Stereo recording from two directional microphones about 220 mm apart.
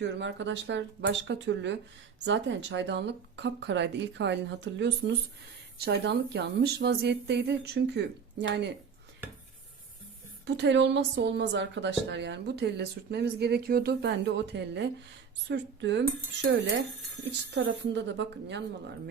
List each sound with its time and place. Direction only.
0.0 s a woman's voice: 55° right (ahead or behind)
10.4 s a woman's voice: 55° right (ahead or behind)